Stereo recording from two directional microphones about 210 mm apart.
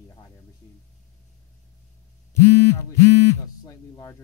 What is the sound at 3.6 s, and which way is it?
Speech, 15° left (ahead or behind).